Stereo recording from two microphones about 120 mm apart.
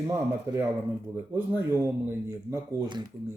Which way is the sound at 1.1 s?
20° right (ahead or behind).